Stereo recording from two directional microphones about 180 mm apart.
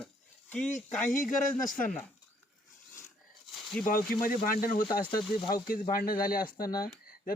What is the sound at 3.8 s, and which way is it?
Speech, 50° left (ahead or behind).